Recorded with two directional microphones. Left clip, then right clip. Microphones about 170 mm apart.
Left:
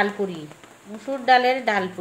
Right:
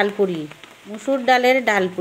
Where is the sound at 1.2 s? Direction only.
65° right (ahead or behind).